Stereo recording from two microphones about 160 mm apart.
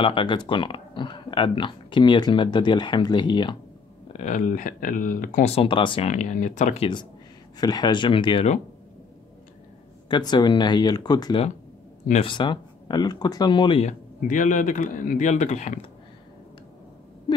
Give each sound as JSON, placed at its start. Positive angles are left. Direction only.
{"t": 0.0, "sound": "speech", "side_deg": 30}
{"t": 4.1, "sound": "speech", "side_deg": 50}
{"t": 5.5, "sound": "speech", "side_deg": 35}
{"t": 6.0, "sound": "speech", "side_deg": 50}
{"t": 7.5, "sound": "speech", "side_deg": 25}
{"t": 10.0, "sound": "speech", "side_deg": 25}
{"t": 13.8, "sound": "speech", "side_deg": 55}